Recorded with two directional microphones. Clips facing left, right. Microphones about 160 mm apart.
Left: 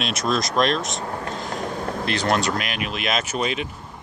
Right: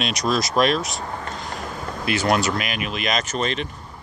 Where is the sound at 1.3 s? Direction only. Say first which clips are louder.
Left 3 dB; centre (ahead or behind).